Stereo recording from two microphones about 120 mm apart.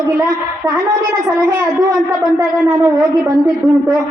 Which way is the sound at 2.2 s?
30° right (ahead or behind).